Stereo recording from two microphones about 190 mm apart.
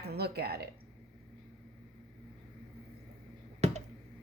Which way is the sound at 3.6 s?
35° right (ahead or behind).